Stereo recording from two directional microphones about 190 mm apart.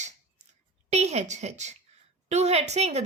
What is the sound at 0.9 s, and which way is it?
A woman's voice, 35° right (ahead or behind).